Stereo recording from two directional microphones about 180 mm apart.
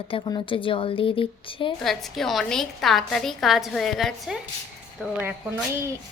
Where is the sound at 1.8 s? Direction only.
Centre (ahead or behind).